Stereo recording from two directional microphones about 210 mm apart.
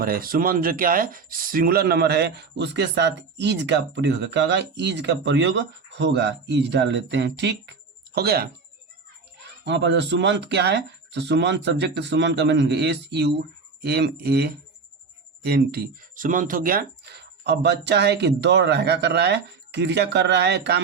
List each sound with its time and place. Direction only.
0.0 s speech: 45° right (ahead or behind)
9.6 s speech: 55° right (ahead or behind)